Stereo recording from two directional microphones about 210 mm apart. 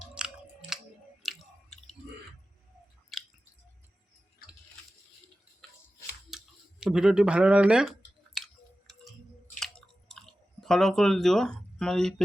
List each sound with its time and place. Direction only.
0.2 s chewing: 5° right (ahead or behind)
3.1 s chewing: centre (ahead or behind)
6.3 s a sound: 5° right (ahead or behind)
8.9 s music: centre (ahead or behind)
9.6 s chewing: centre (ahead or behind)